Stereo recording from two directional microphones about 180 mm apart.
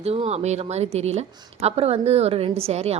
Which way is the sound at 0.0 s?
35° right (ahead or behind).